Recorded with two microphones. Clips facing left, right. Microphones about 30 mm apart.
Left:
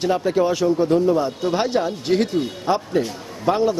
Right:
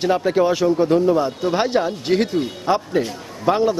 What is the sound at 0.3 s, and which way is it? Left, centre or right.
A man's voice, right.